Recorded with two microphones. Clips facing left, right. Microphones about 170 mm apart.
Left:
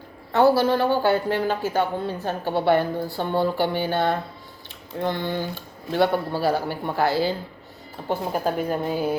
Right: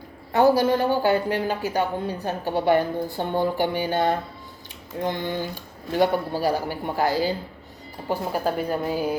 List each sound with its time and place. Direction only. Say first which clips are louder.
0.3 s speech: even; 15° right (ahead or behind)